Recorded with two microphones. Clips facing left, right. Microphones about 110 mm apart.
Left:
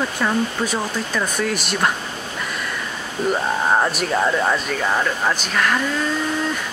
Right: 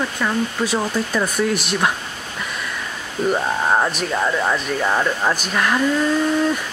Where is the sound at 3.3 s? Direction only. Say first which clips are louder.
Even; centre (ahead or behind).